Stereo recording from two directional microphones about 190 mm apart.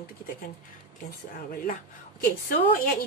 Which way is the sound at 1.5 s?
45° left (ahead or behind).